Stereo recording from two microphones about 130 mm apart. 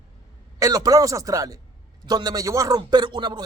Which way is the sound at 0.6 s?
30° right (ahead or behind).